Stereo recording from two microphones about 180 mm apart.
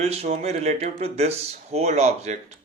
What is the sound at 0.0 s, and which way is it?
Speech, 35° right (ahead or behind).